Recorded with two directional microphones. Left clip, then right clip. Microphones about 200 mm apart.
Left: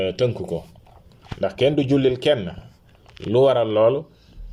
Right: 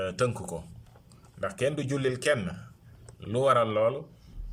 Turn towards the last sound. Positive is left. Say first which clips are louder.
# left 7 dB
turn(degrees=10)  # may be behind; listen again after turning